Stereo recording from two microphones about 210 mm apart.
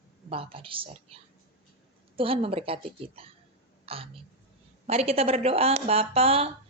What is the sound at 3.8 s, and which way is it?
Whispering, 25° right (ahead or behind).